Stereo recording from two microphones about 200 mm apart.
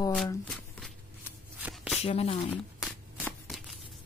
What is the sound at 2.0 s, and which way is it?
Speech, 30° left (ahead or behind).